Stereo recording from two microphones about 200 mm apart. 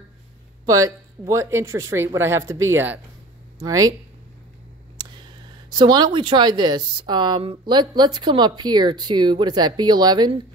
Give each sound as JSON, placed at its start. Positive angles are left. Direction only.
{"t": 0.7, "sound": "speech", "side_deg": -15}
{"t": 4.9, "sound": "speech", "side_deg": -20}